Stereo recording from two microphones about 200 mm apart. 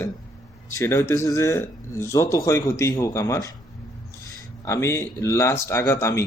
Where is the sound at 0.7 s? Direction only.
15° left (ahead or behind).